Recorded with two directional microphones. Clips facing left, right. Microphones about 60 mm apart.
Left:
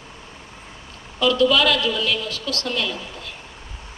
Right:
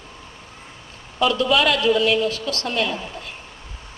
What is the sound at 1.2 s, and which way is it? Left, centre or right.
A woman's voice, right.